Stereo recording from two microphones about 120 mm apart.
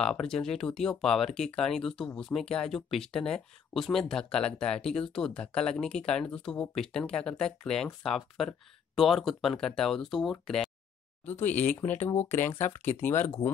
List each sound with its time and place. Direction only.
0.0 s speech: 5° left (ahead or behind)
11.2 s speech: 15° left (ahead or behind)